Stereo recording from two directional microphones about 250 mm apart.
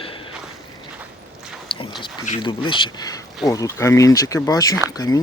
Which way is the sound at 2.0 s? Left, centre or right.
Centre.